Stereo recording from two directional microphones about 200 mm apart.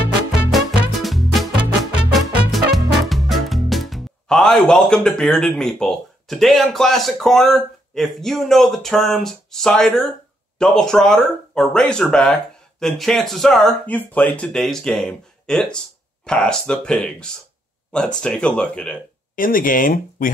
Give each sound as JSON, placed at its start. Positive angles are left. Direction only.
{"t": 0.5, "sound": "music", "side_deg": 0}
{"t": 10.6, "sound": "speech", "side_deg": 5}
{"t": 19.3, "sound": "speech", "side_deg": 45}